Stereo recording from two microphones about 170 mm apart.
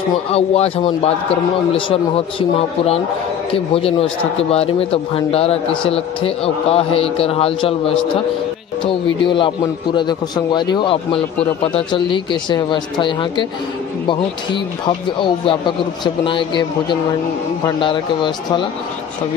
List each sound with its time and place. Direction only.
0.3 s a man's voice: 35° left (ahead or behind)
3.5 s a man's voice: 35° left (ahead or behind)
17.6 s speech: 30° left (ahead or behind)